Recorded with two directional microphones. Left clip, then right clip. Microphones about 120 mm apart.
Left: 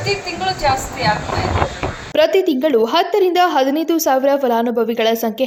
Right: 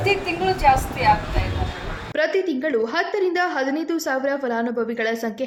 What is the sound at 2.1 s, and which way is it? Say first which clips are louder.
A woman's voice: left 7 dB; 50° left (ahead or behind).